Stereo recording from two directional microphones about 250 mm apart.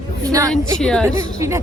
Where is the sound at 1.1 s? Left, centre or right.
Centre.